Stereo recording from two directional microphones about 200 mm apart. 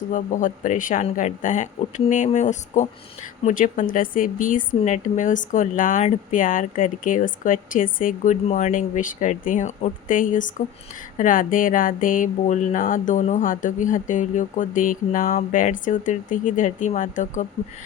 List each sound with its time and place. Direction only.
0.1 s speech: 40° left (ahead or behind)